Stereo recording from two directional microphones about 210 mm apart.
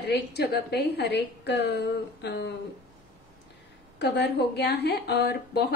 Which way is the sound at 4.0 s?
55° left (ahead or behind).